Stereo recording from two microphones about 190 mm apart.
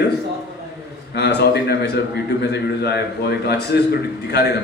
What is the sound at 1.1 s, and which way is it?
A man's voice, 60° left (ahead or behind).